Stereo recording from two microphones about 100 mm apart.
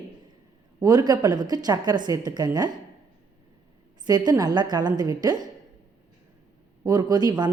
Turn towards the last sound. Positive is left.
turn(degrees=-45)  # may be behind; listen again after turning